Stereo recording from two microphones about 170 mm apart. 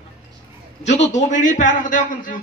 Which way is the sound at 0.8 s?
40° left (ahead or behind).